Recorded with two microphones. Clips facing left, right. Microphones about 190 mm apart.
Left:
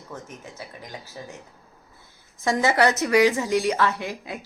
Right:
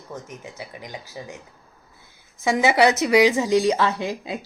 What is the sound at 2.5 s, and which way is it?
A woman's voice, 15° right (ahead or behind).